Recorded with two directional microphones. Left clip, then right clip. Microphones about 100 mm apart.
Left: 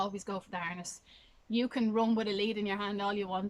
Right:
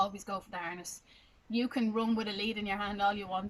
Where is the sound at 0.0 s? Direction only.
20° left (ahead or behind).